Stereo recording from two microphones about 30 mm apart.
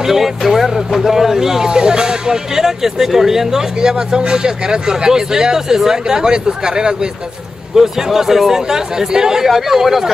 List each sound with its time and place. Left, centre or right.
0.0 s speech: centre
1.7 s speech: right
3.9 s speech: right
9.5 s speech: centre